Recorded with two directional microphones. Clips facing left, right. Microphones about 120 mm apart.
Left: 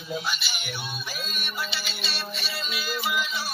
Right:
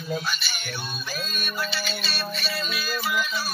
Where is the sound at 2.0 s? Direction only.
20° left (ahead or behind).